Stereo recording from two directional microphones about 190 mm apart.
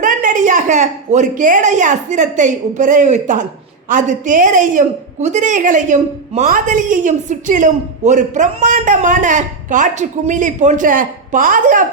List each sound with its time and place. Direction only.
0.0 s speech: 45° right (ahead or behind)